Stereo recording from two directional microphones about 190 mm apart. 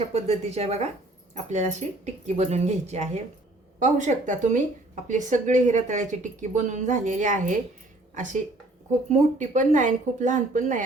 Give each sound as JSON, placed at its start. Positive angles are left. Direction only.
{"t": 0.1, "sound": "a woman's voice", "side_deg": -35}